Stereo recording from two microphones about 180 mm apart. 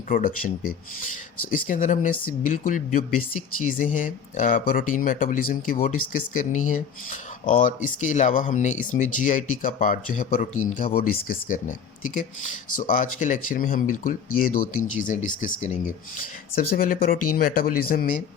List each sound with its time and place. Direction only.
0.1 s speech: 50° left (ahead or behind)
12.7 s speech: 45° left (ahead or behind)